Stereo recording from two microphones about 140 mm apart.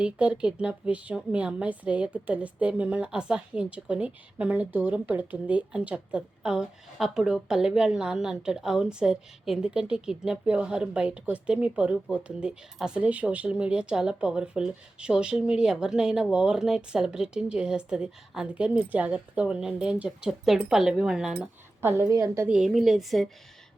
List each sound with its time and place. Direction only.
0.0 s a woman's voice: 5° right (ahead or behind)
21.8 s a woman's voice: 15° right (ahead or behind)
22.4 s a woman's voice: 5° right (ahead or behind)